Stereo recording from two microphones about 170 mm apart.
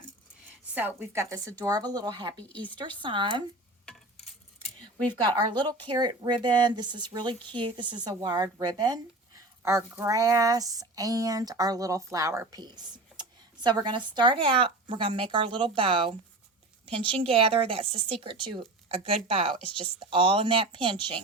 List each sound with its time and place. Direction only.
0.7 s speech: 10° right (ahead or behind)
2.3 s speech: 10° left (ahead or behind)
2.6 s speech: 25° right (ahead or behind)
5.2 s a woman's voice: 25° right (ahead or behind)